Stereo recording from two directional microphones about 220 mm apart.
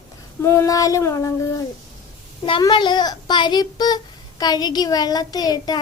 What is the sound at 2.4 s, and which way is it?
Speech, 20° left (ahead or behind).